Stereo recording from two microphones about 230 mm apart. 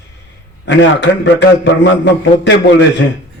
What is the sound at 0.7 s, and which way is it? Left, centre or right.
Speech, left.